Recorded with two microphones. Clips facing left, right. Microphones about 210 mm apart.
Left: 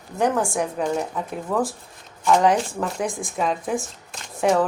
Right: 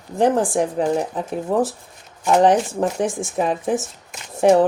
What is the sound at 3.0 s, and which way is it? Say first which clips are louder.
Speech: right 4 dB; 75° right (ahead or behind).